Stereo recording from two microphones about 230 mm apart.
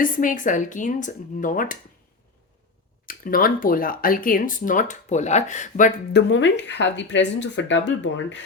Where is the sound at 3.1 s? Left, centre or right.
Left.